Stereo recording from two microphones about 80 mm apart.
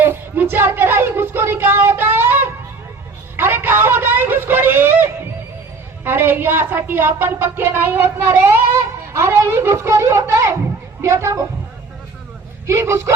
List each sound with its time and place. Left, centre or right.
0.0 s child singing: right
3.3 s a sound: right
6.1 s a woman's voice: right
12.6 s a woman's voice: right